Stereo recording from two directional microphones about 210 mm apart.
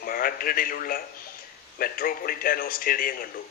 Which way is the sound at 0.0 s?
45° left (ahead or behind).